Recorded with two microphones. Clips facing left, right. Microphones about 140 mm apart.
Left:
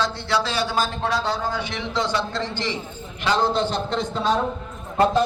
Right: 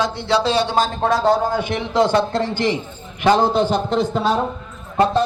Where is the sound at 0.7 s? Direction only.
45° right (ahead or behind).